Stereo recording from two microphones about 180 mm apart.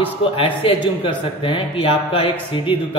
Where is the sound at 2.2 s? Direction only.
30° left (ahead or behind).